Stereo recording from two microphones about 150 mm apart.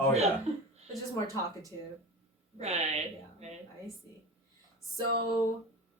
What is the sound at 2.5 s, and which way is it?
A woman's voice, 45° right (ahead or behind).